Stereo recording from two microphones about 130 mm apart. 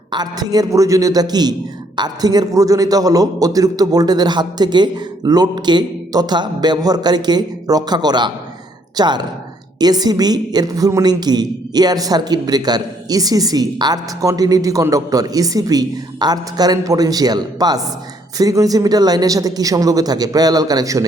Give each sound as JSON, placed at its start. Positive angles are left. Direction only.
{"t": 0.1, "sound": "a woman's voice", "side_deg": -30}